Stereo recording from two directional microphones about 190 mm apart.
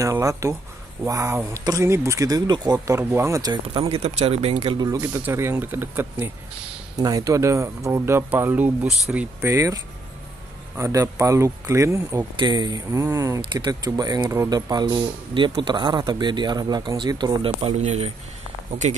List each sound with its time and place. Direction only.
0.0 s speech: 15° right (ahead or behind)
3.6 s speech: 30° right (ahead or behind)
10.8 s speech: 15° right (ahead or behind); by 18.1 s 35° right (ahead or behind)